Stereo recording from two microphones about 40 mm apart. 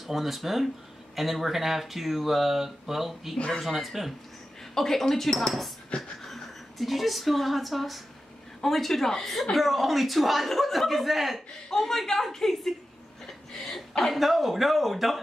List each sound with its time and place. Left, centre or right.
0.0 s speech: centre
3.3 s speech: left
3.6 s speech: centre
4.7 s a woman's voice: centre
5.9 s a sound: left
6.2 s a woman's voice: centre